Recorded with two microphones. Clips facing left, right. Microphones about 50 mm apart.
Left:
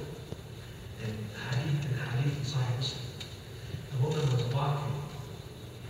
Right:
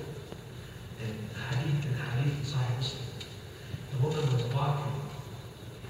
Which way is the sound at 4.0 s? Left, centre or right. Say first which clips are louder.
Even; centre.